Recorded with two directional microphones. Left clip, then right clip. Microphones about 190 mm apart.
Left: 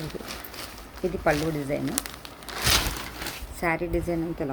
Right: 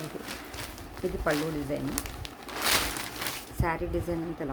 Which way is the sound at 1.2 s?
20° left (ahead or behind).